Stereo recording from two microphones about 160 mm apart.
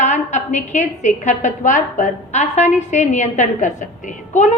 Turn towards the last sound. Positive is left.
turn(degrees=50)  # may be behind; listen again after turning